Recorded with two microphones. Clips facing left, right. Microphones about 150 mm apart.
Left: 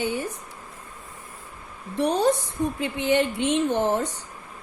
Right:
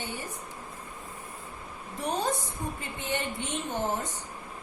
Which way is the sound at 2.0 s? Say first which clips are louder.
Left 9 dB; 75° left (ahead or behind).